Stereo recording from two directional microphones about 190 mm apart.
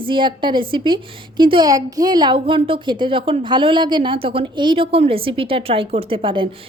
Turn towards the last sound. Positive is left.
turn(degrees=-25)  # may be behind; listen again after turning